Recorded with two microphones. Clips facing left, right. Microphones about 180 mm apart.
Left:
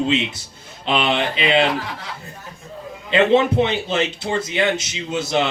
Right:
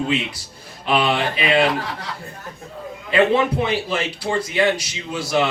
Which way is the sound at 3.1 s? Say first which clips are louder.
Left 2 dB; 25° left (ahead or behind).